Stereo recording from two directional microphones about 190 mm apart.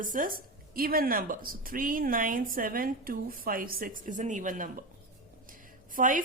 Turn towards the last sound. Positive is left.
turn(degrees=-45)  # may be behind; listen again after turning